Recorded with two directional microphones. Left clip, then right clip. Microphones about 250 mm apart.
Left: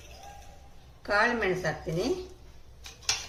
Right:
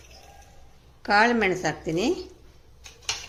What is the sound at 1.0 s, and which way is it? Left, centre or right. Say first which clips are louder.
A woman's voice: right 5 dB; right.